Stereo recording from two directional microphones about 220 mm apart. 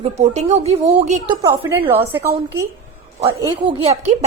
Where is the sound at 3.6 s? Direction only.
25° right (ahead or behind).